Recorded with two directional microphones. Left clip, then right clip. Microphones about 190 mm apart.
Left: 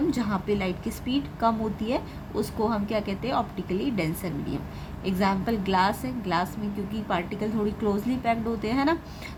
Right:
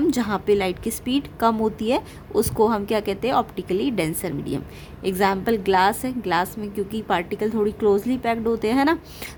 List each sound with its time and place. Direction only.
0.1 s a woman's voice: 50° right (ahead or behind)